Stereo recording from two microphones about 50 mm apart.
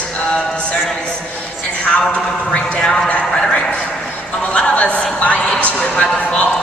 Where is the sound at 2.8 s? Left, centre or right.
Centre.